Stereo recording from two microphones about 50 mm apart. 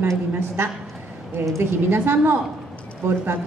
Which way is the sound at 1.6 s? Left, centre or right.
Right.